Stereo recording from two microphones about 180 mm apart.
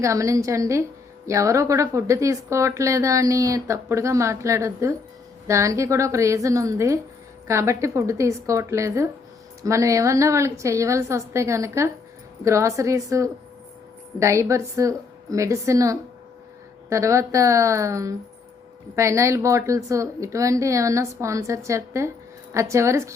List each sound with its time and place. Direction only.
0.0 s a woman's voice: 15° right (ahead or behind)